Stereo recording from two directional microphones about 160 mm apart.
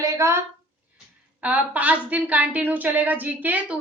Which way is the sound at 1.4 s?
10° right (ahead or behind).